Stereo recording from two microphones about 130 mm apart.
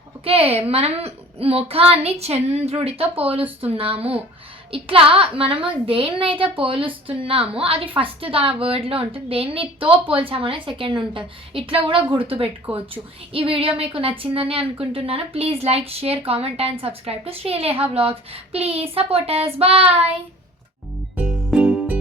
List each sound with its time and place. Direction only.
0.3 s a woman's voice: 50° right (ahead or behind)
21.2 s music: 5° right (ahead or behind)